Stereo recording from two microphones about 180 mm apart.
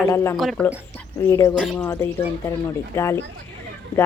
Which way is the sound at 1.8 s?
15° left (ahead or behind).